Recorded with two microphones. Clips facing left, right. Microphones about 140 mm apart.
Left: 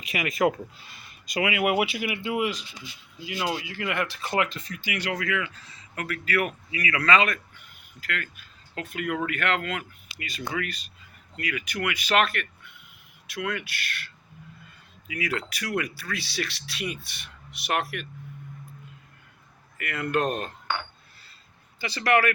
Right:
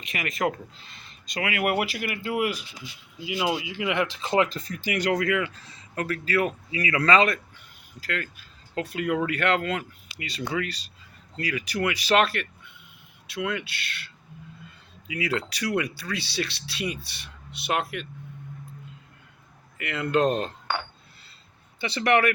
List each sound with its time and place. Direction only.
0.1 s speech: 5° left (ahead or behind); by 4.4 s 20° right (ahead or behind)
4.4 s speech: 40° right (ahead or behind); by 18.0 s 20° right (ahead or behind)
19.8 s speech: 25° right (ahead or behind)
21.8 s speech: 25° right (ahead or behind)